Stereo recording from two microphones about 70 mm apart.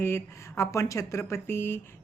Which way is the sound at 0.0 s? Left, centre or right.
Left.